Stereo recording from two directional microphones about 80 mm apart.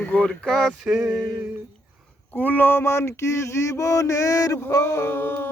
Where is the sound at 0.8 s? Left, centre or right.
Centre.